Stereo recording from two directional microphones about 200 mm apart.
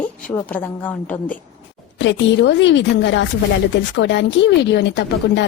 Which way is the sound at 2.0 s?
65° left (ahead or behind).